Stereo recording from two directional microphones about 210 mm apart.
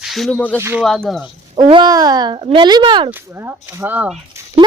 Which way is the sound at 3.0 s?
10° right (ahead or behind).